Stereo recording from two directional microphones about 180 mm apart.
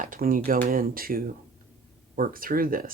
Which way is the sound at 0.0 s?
50° right (ahead or behind).